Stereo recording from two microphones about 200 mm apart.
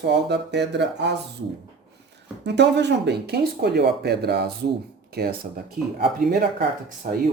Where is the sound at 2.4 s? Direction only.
60° right (ahead or behind).